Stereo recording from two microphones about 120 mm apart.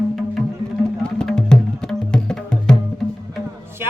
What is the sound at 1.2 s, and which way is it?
Music, 5° left (ahead or behind).